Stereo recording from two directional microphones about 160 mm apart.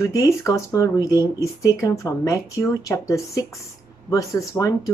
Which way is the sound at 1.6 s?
20° left (ahead or behind).